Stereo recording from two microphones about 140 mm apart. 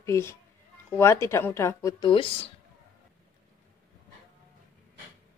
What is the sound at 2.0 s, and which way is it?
Speech, 40° left (ahead or behind).